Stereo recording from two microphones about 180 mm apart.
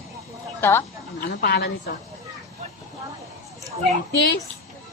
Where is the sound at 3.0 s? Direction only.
20° right (ahead or behind).